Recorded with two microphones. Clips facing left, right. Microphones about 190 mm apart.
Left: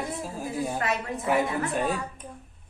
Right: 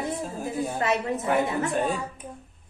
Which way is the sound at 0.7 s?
25° right (ahead or behind).